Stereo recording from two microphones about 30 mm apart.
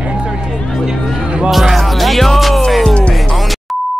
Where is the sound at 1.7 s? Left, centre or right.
Centre.